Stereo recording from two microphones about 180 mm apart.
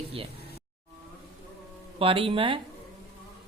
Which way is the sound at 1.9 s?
30° right (ahead or behind).